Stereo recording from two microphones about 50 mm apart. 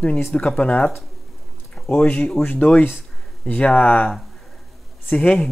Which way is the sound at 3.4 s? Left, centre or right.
Left.